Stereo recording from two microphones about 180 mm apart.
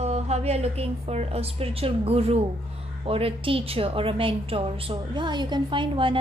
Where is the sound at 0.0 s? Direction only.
35° right (ahead or behind).